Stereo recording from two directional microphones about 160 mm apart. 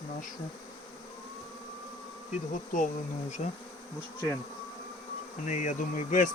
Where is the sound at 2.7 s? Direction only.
55° left (ahead or behind).